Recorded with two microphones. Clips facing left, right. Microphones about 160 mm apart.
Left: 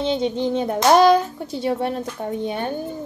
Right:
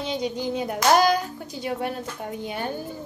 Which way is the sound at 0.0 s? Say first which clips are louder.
Left 6 dB; 25° left (ahead or behind).